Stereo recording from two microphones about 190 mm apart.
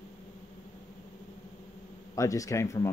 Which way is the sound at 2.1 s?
15° left (ahead or behind).